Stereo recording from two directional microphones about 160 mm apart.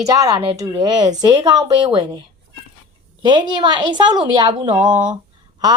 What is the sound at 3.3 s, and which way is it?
A woman's voice, 30° right (ahead or behind).